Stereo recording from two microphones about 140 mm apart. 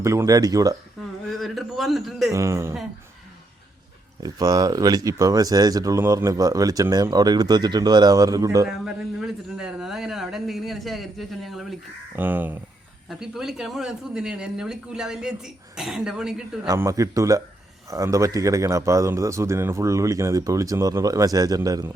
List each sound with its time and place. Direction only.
0.0 s speech: 20° right (ahead or behind)
1.3 s speech: centre (ahead or behind)
2.3 s speech: 20° right (ahead or behind)
4.2 s speech: 25° right (ahead or behind)
8.6 s speech: 5° right (ahead or behind)
12.1 s speech: 15° right (ahead or behind)
13.1 s speech: centre (ahead or behind)
16.6 s speech: 20° right (ahead or behind)